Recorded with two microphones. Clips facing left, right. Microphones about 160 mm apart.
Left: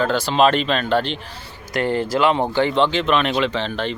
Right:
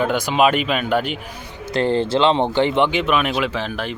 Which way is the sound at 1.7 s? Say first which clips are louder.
Right 2 dB; 30° right (ahead or behind).